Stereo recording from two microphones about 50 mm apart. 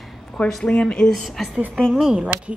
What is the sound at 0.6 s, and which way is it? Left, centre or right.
Speech, centre.